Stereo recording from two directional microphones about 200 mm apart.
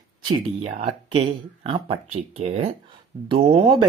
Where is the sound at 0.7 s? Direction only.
40° right (ahead or behind).